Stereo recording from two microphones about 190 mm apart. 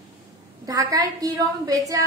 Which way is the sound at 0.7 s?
20° right (ahead or behind).